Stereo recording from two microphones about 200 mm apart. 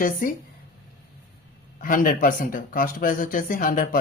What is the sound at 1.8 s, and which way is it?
Speech, 45° left (ahead or behind).